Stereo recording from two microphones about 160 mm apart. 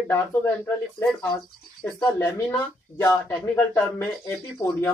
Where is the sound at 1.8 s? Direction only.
15° left (ahead or behind).